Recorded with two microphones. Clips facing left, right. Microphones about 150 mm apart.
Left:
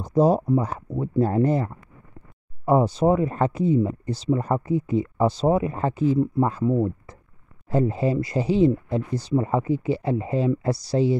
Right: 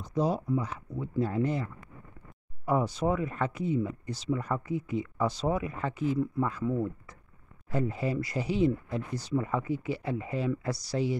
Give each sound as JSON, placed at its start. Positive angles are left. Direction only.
{"t": 0.0, "sound": "speech", "side_deg": 40}
{"t": 2.6, "sound": "speech", "side_deg": 30}